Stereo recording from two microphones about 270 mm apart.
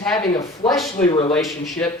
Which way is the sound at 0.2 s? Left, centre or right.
Centre.